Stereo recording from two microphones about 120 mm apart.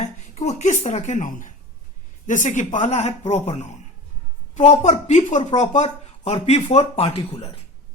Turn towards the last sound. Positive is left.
turn(degrees=55)  # may be behind; listen again after turning